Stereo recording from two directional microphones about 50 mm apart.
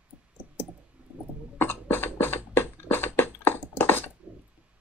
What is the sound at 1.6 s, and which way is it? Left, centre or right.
Beatboxing, left.